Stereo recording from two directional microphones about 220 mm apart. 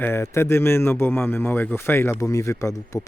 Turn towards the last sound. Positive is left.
turn(degrees=15)  # may be behind; listen again after turning